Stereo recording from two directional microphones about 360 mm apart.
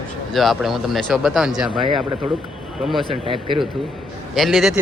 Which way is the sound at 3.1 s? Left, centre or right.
Centre.